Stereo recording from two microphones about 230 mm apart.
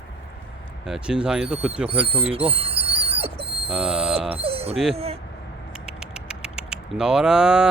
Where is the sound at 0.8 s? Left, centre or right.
Centre.